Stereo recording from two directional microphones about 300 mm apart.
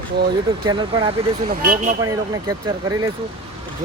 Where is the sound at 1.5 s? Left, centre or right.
Right.